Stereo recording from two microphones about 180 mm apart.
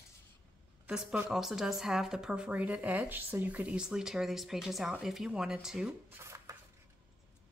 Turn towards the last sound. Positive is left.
turn(degrees=-15)  # may be behind; listen again after turning